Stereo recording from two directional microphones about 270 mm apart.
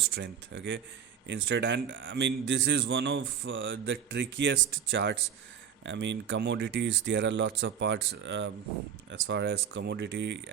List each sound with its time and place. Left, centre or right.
0.1 s speech: right